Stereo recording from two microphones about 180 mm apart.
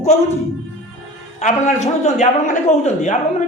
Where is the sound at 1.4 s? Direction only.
40° left (ahead or behind).